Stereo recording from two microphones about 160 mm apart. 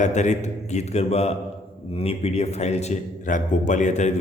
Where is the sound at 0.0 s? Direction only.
45° left (ahead or behind).